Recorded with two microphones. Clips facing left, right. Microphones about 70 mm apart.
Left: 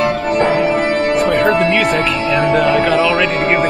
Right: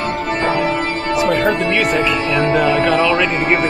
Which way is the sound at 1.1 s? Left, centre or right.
Centre.